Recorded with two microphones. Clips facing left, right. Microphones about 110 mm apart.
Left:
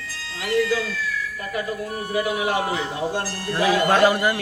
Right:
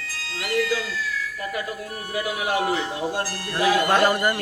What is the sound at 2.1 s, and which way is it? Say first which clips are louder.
A man's voice: left 2 dB; 30° left (ahead or behind).